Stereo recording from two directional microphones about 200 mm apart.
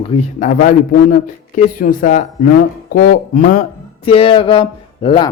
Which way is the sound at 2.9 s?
45° left (ahead or behind).